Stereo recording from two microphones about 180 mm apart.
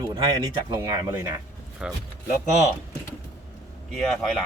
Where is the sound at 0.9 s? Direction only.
15° right (ahead or behind).